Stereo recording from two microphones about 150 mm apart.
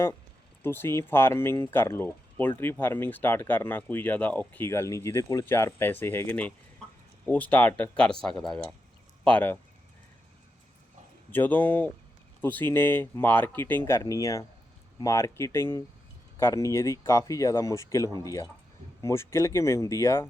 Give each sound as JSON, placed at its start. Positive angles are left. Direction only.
{"t": 0.6, "sound": "speech", "side_deg": 15}
{"t": 11.3, "sound": "speech", "side_deg": 10}